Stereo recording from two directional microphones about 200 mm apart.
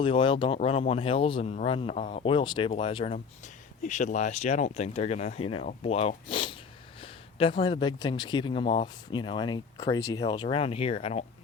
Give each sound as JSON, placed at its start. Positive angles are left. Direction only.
{"t": 0.0, "sound": "speech", "side_deg": 25}
{"t": 2.3, "sound": "speech", "side_deg": 25}
{"t": 3.8, "sound": "speech", "side_deg": 40}